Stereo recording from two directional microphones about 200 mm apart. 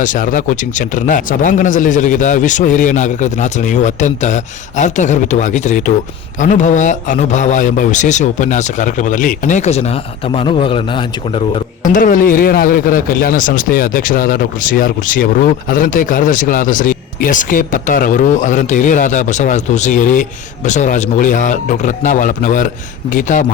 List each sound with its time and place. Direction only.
0.0 s speech: 40° left (ahead or behind)